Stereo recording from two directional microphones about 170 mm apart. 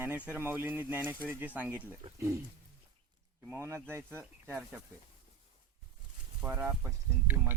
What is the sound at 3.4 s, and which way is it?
Speech, 15° right (ahead or behind).